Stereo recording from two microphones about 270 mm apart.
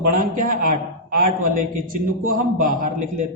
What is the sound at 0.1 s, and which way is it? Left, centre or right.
A man's voice, right.